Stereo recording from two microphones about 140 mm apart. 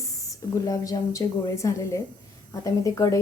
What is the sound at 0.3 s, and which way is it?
Speech, 25° left (ahead or behind).